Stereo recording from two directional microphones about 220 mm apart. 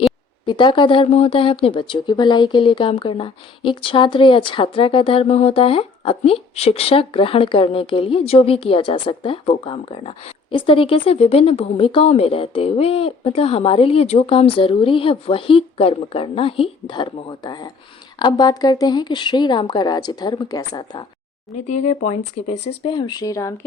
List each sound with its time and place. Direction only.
0.4 s speech: 20° left (ahead or behind)
21.5 s speech: 30° left (ahead or behind); by 23.6 s 15° left (ahead or behind)